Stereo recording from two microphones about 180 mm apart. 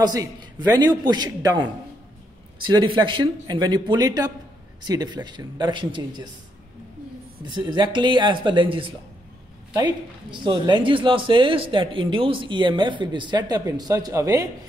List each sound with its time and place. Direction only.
0.0 s speech: 20° right (ahead or behind)
2.6 s speech: 25° right (ahead or behind)
7.5 s speech: 25° right (ahead or behind)
10.4 s speech: 25° right (ahead or behind)